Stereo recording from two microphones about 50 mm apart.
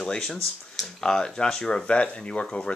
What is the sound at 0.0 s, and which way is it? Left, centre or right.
Speech, centre.